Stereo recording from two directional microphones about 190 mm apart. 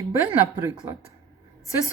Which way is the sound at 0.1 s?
10° right (ahead or behind).